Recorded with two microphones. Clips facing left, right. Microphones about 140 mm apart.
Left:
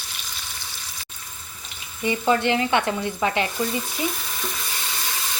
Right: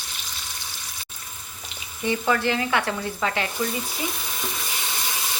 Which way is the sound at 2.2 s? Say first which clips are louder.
Left 4 dB; 25° left (ahead or behind).